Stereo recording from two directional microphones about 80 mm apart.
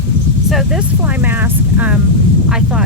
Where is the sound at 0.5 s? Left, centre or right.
Centre.